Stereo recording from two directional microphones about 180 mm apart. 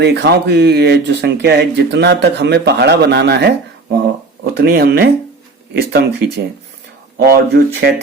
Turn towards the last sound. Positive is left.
turn(degrees=-65)  # may be behind; listen again after turning